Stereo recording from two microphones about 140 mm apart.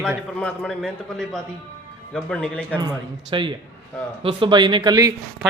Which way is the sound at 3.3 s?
35° right (ahead or behind).